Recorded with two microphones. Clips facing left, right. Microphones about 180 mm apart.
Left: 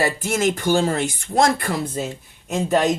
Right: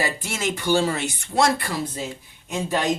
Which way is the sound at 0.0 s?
45° left (ahead or behind).